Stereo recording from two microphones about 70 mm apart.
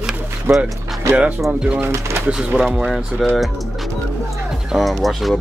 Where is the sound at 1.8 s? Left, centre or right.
Right.